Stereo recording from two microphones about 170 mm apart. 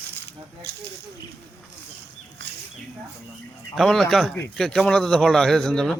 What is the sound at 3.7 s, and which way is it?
Speech, centre (ahead or behind).